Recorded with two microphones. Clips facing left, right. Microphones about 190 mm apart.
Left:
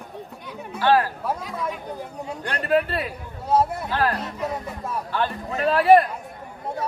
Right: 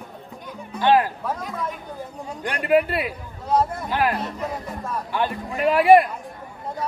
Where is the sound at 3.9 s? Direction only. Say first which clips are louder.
Right 1 dB; 15° right (ahead or behind).